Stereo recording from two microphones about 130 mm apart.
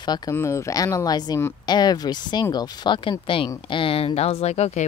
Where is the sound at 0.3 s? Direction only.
20° left (ahead or behind).